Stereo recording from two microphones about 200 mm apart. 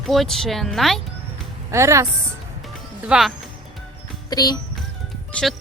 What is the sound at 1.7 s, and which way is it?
Speech, 15° right (ahead or behind).